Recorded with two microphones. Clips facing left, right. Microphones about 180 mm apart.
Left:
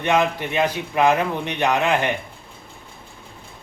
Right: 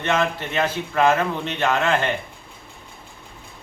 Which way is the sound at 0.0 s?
15° left (ahead or behind).